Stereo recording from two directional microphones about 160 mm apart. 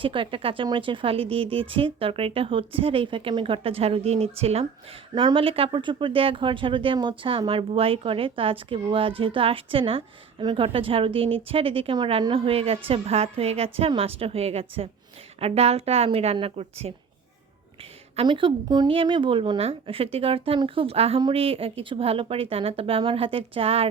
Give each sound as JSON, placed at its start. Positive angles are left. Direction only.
{"t": 0.0, "sound": "speech", "side_deg": -35}
{"t": 18.2, "sound": "speech", "side_deg": -30}